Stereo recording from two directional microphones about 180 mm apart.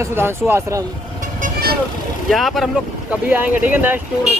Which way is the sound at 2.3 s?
Centre (ahead or behind).